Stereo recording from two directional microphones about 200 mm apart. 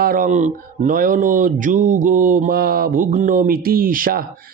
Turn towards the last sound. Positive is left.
turn(degrees=-45)  # may be behind; listen again after turning